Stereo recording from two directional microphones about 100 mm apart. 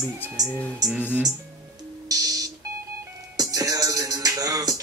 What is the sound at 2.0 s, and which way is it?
Beep, 40° right (ahead or behind).